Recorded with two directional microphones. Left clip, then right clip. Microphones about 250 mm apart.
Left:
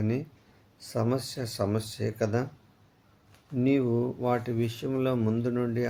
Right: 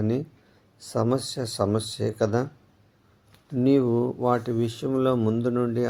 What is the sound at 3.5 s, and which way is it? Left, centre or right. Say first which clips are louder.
Speech: right 5 dB; centre.